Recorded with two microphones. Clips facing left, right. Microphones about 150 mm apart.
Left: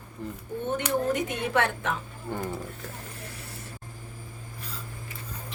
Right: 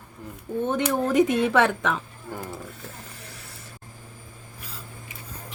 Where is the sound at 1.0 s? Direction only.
90° right.